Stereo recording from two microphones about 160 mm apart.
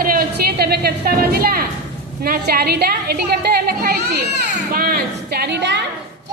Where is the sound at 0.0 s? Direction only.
65° right (ahead or behind).